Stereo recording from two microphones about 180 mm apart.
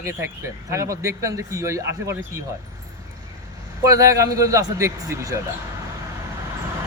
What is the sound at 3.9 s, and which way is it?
Speech, 20° right (ahead or behind).